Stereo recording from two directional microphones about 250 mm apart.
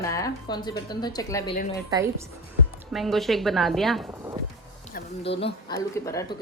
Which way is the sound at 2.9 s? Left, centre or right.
Centre.